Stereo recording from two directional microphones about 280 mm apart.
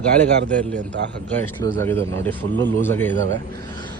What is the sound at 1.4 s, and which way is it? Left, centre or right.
A man's voice, centre.